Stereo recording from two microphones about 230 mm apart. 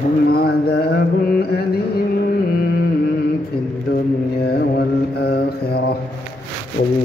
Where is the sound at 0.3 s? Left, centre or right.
Left.